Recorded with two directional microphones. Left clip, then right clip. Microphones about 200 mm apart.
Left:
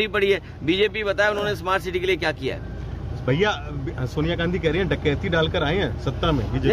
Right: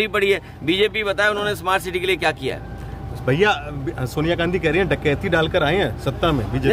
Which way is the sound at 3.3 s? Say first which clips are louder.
Right 4 dB; 45° right (ahead or behind).